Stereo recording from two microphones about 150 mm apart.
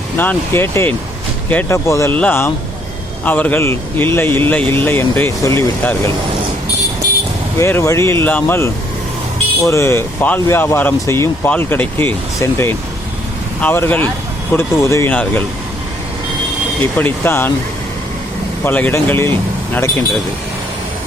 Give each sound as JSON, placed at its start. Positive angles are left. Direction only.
{"t": 0.2, "sound": "speech", "side_deg": 15}
{"t": 7.6, "sound": "speech", "side_deg": 20}
{"t": 16.8, "sound": "speech", "side_deg": 15}
{"t": 18.6, "sound": "speech", "side_deg": 15}